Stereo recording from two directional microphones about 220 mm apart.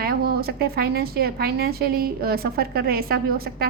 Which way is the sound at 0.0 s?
40° right (ahead or behind).